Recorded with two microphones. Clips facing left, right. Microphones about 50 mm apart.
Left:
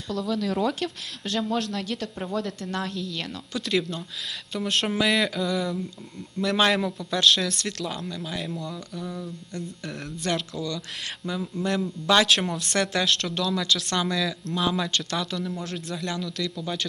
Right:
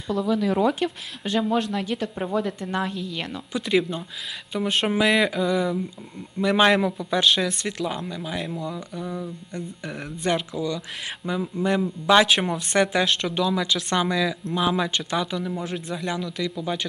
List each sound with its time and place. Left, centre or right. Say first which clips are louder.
0.1 s a man's voice: right 4 dB; centre
9.5 s a man's voice: right 2 dB; centre